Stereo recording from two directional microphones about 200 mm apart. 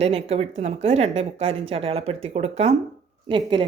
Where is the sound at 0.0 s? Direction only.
30° right (ahead or behind).